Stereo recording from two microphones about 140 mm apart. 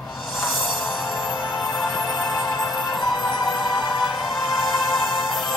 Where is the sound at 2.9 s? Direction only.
30° left (ahead or behind).